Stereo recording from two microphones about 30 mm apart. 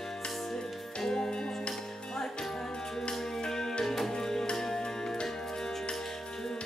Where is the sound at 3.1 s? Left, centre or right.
Centre.